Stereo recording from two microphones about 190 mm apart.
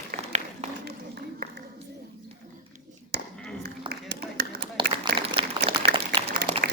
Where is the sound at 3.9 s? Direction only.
55° right (ahead or behind).